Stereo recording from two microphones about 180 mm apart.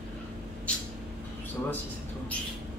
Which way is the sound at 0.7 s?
5° left (ahead or behind).